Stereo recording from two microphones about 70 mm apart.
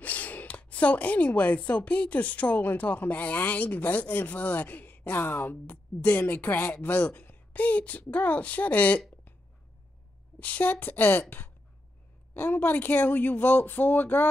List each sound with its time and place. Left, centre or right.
0.0 s speech: left
10.4 s speech: left